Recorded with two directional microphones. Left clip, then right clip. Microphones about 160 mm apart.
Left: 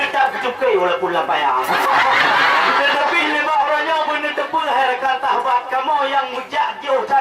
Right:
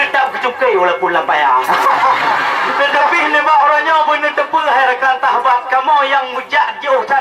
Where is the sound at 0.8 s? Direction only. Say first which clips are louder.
Right 5 dB; 20° left (ahead or behind).